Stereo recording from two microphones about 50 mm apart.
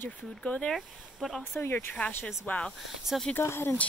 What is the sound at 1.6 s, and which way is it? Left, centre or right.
Speech, left.